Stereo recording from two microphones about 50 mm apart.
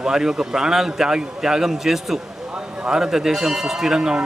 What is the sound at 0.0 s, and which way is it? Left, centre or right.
Speech, centre.